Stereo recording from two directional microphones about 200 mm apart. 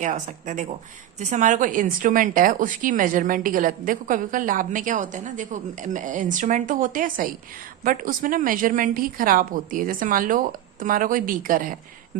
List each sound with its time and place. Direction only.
0.0 s a woman's voice: 40° right (ahead or behind)